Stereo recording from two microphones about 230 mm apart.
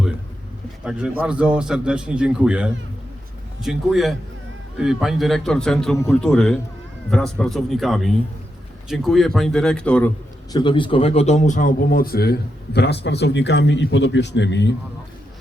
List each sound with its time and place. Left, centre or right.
0.9 s a man's voice: centre
10.5 s a man's voice: centre; by 14.8 s left